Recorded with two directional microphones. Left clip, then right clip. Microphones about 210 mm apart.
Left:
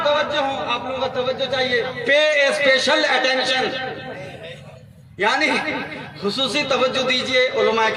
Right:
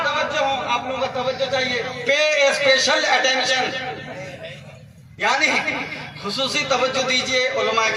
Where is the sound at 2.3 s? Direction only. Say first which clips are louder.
Even; 55° left (ahead or behind).